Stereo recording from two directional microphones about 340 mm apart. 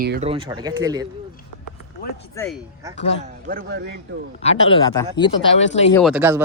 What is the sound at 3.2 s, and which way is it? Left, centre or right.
Speech, right.